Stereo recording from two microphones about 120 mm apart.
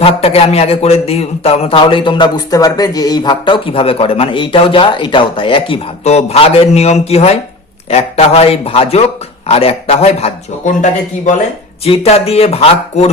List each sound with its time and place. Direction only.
0.0 s a man's voice: 55° left (ahead or behind)
6.1 s speech: 60° left (ahead or behind)
10.8 s a man's voice: 85° left
11.9 s speech: 55° left (ahead or behind)